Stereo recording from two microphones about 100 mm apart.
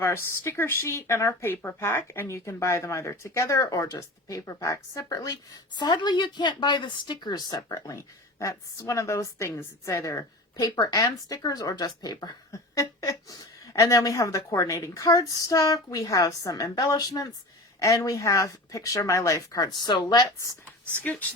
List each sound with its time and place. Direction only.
0.0 s a woman's voice: 25° left (ahead or behind); by 20.2 s 45° left (ahead or behind)